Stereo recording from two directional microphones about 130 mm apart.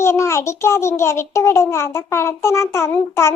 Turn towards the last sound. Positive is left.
turn(degrees=20)  # may be behind; listen again after turning